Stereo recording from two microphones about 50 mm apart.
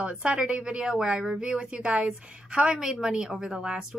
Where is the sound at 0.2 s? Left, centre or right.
Right.